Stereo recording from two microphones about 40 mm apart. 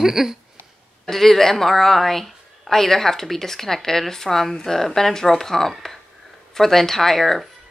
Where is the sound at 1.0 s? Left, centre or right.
Centre.